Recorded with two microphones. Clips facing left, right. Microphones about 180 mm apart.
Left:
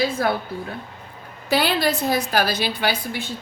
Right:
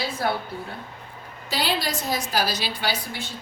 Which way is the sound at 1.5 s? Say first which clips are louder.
Left 6 dB; 60° left (ahead or behind).